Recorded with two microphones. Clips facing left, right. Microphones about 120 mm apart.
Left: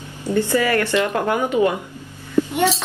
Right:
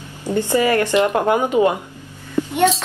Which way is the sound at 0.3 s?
20° right (ahead or behind).